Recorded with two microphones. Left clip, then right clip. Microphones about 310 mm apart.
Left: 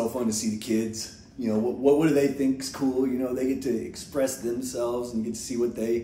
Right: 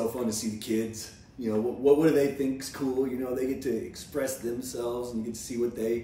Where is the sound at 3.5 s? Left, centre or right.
Centre.